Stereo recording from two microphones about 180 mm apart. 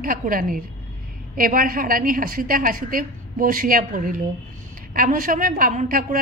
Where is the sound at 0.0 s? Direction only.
50° right (ahead or behind).